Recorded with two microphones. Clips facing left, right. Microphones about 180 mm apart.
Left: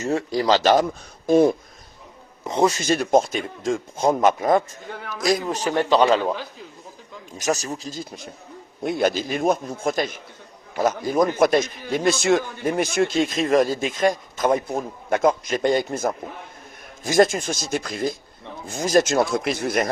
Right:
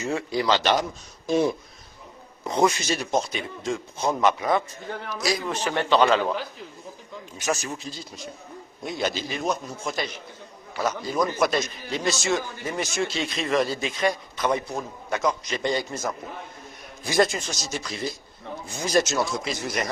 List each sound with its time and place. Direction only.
0.0 s a man's voice: 35° left (ahead or behind)
2.4 s a man's voice: 20° left (ahead or behind)
2.6 s a man's voice: 45° left (ahead or behind)
7.3 s a man's voice: 40° left (ahead or behind); by 19.9 s 55° left (ahead or behind)